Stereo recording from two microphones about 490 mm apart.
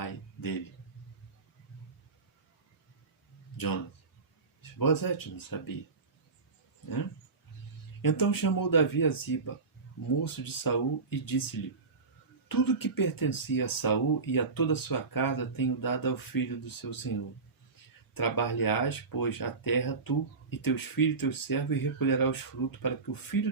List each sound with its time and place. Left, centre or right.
0.0 s a sound: left
4.6 s speech: left
6.8 s speech: left
12.5 s speech: left